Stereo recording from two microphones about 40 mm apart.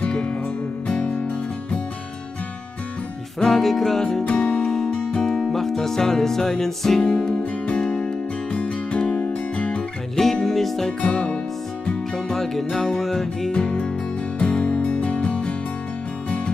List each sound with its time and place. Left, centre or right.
0.1 s music: left
3.3 s music: centre
4.2 s music: left
5.1 s music: centre
7.0 s music: left
10.1 s music: centre
11.0 s music: left
12.4 s music: centre
13.5 s music: left